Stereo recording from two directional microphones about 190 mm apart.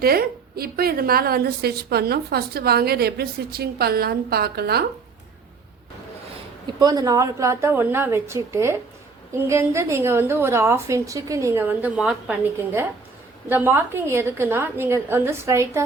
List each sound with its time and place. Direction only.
0.0 s a woman's voice: 50° right (ahead or behind)
6.7 s a woman's voice: 20° right (ahead or behind)